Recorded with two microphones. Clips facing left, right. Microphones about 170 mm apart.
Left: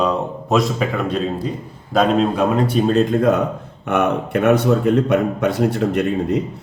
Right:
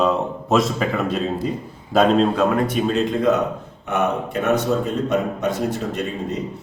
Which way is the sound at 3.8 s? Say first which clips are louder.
Left 3 dB; 60° left (ahead or behind).